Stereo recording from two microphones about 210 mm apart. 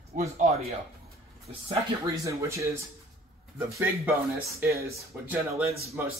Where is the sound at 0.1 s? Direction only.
30° right (ahead or behind).